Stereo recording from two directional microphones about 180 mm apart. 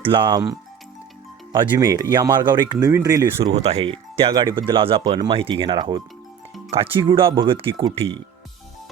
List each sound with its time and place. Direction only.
0.0 s speech: 30° right (ahead or behind)
1.5 s speech: 25° right (ahead or behind)
3.5 s speech: 35° right (ahead or behind)